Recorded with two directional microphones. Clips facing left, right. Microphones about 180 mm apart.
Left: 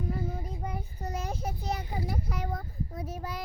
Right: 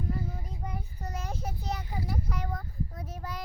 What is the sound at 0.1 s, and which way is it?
Child singing, 20° left (ahead or behind).